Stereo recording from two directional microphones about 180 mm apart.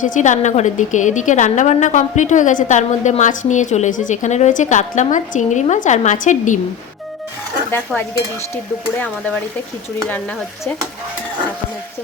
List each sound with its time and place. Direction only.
0.0 s a woman's voice: 45° left (ahead or behind)
7.9 s stir: 10° left (ahead or behind)